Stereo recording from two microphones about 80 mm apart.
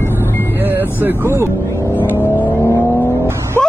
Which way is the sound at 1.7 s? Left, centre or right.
Left.